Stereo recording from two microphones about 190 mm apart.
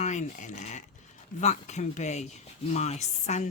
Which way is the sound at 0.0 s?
40° left (ahead or behind).